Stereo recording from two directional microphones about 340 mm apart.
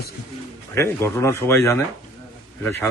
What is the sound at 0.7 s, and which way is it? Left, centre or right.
A man's voice, centre.